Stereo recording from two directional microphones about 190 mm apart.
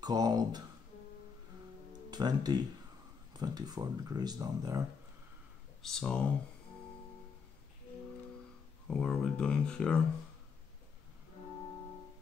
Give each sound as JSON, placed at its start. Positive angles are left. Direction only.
{"t": 0.0, "sound": "speech", "side_deg": -20}
{"t": 2.0, "sound": "speech", "side_deg": -20}
{"t": 5.8, "sound": "speech", "side_deg": 0}
{"t": 8.8, "sound": "speech", "side_deg": 5}